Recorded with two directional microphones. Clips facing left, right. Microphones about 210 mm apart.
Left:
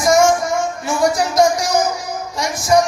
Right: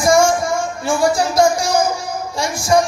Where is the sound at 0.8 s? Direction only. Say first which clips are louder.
Right 2 dB; 30° right (ahead or behind).